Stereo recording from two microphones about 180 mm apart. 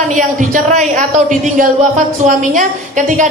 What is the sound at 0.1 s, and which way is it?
A woman's voice, 45° right (ahead or behind).